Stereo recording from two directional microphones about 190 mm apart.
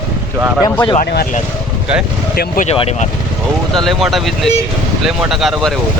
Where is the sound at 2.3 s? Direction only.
50° left (ahead or behind).